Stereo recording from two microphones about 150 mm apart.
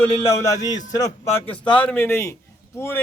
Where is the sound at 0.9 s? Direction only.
20° left (ahead or behind).